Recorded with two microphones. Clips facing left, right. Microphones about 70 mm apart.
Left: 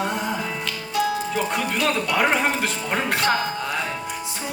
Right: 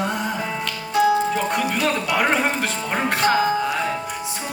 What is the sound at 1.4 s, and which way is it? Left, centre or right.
Speech, centre.